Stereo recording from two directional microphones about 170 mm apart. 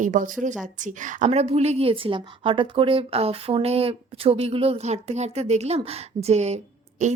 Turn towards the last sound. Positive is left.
turn(degrees=-40)  # may be behind; listen again after turning